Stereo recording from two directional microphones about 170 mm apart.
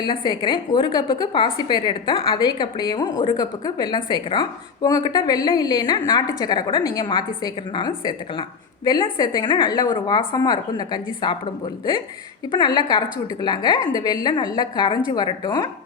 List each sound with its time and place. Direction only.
0.0 s a woman's voice: 25° left (ahead or behind)
12.5 s a woman's voice: 25° left (ahead or behind)